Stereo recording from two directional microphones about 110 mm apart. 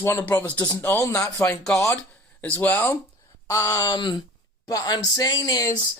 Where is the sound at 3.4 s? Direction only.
30° left (ahead or behind).